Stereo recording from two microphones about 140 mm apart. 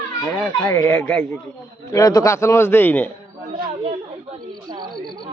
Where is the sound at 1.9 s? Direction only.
25° left (ahead or behind).